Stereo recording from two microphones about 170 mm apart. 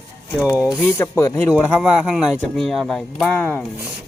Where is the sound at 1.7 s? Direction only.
5° right (ahead or behind).